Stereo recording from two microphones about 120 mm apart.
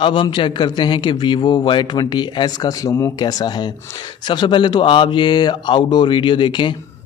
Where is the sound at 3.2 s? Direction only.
35° left (ahead or behind).